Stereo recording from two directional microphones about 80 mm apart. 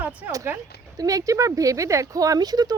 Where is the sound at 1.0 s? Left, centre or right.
Right.